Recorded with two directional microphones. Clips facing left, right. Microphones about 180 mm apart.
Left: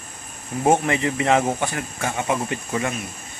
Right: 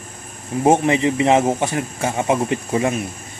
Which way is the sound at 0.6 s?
20° right (ahead or behind).